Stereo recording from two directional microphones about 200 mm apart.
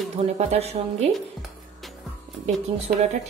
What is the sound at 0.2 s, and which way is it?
Speech, 30° right (ahead or behind).